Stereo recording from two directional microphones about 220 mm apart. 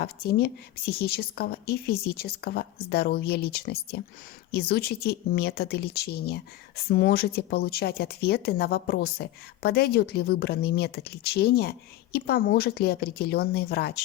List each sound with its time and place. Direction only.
0.0 s speech: 45° left (ahead or behind)